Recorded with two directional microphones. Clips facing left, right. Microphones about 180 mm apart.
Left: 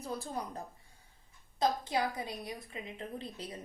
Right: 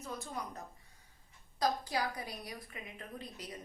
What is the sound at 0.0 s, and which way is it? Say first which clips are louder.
A woman's voice: left 4 dB; 35° left (ahead or behind).